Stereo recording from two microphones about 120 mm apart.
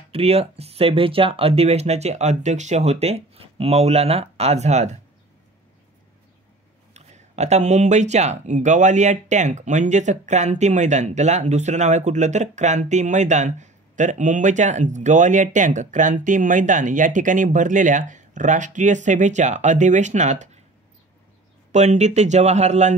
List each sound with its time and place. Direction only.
0.1 s speech: 55° right (ahead or behind)
6.9 s speech: 70° right (ahead or behind)
21.7 s speech: 75° right (ahead or behind)